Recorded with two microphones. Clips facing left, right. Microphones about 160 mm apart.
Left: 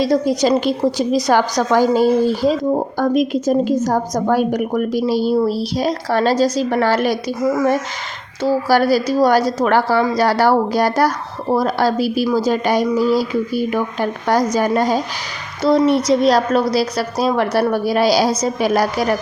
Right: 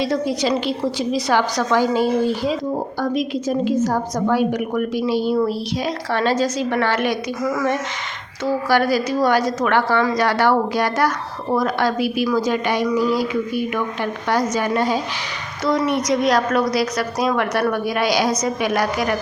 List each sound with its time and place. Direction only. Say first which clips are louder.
0.0 s a woman's voice: left 5 dB; 40° left (ahead or behind)
15.6 s a woman's voice: left 5 dB; 30° left (ahead or behind)